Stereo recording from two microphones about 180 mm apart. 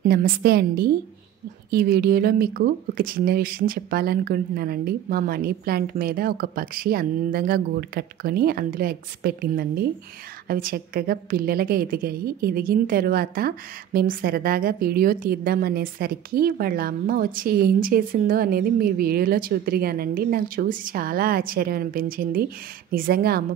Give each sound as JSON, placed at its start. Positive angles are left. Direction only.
{"t": 0.0, "sound": "a woman's voice", "side_deg": -55}